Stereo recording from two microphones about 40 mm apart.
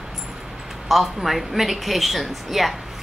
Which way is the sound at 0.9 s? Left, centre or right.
Centre.